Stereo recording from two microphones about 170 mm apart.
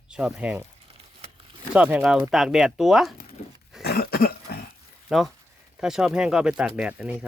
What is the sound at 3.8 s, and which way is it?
Cough, 65° left (ahead or behind).